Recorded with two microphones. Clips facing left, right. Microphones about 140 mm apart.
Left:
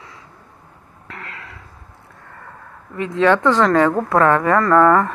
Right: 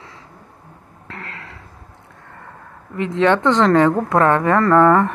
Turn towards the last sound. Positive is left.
turn(degrees=-20)  # may be behind; listen again after turning